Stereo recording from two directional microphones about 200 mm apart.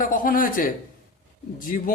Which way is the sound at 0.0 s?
45° left (ahead or behind).